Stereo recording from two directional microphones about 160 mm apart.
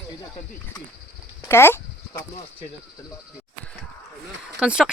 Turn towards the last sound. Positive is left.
turn(degrees=-5)  # may be behind; listen again after turning